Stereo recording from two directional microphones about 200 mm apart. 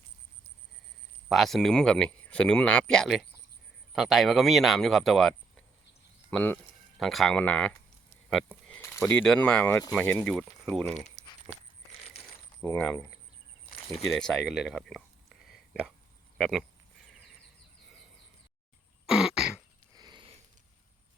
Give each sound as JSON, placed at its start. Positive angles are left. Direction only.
{"t": 1.3, "sound": "speech", "side_deg": 0}
{"t": 6.3, "sound": "speech", "side_deg": 10}
{"t": 12.6, "sound": "speech", "side_deg": 5}
{"t": 19.0, "sound": "throat clearing", "side_deg": -5}
{"t": 19.9, "sound": "sniff", "side_deg": -20}